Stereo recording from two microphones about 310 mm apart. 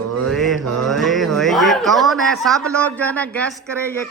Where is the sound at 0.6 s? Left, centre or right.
Right.